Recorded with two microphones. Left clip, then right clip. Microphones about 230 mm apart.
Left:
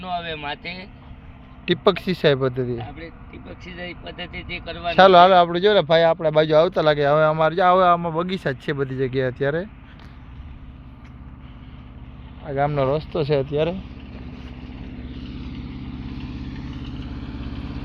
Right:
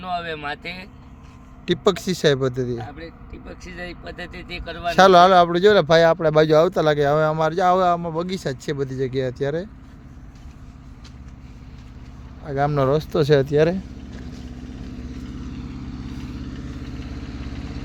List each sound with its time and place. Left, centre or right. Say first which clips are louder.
0.0 s speech: right 1 dB; centre
1.6 s a man's voice: left 1 dB; centre
4.9 s speech: even; right
12.5 s speech: even; right
12.7 s speech: right 2 dB; right
15.4 s vehicle: even; centre
16.5 s vehicle: even; left